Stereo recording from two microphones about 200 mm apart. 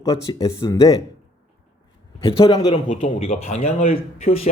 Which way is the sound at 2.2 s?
25° left (ahead or behind).